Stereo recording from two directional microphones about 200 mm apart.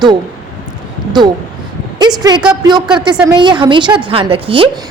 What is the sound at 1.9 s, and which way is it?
A woman's voice, 20° right (ahead or behind).